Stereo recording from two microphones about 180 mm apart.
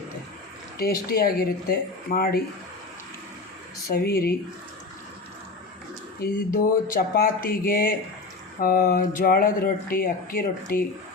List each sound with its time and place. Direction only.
0.8 s speech: 60° left (ahead or behind)
3.9 s speech: 55° left (ahead or behind)
6.2 s speech: 55° left (ahead or behind)